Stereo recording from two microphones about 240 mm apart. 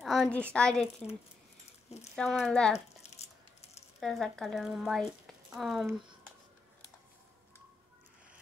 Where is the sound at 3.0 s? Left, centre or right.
Left.